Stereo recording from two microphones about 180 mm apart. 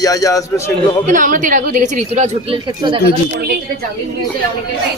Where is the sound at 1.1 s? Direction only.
45° right (ahead or behind).